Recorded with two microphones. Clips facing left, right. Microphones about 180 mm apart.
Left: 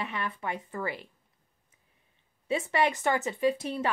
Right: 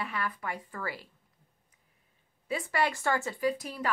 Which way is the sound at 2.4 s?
25° left (ahead or behind).